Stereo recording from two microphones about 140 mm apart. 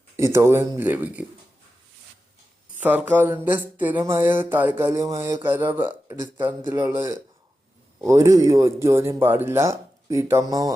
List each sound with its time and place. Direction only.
0.2 s speech: 20° right (ahead or behind)
2.7 s speech: 15° right (ahead or behind)
8.0 s speech: 20° right (ahead or behind)